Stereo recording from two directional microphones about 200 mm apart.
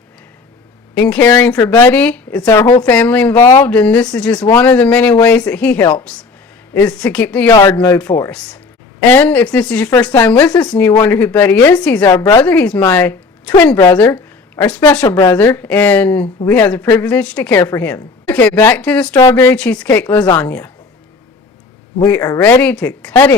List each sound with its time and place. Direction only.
0.9 s a woman's voice: 5° left (ahead or behind)
7.5 s a woman's voice: 20° left (ahead or behind)
7.8 s a woman's voice: 5° left (ahead or behind)
15.0 s a woman's voice: 20° left (ahead or behind)
22.4 s a woman's voice: 10° left (ahead or behind)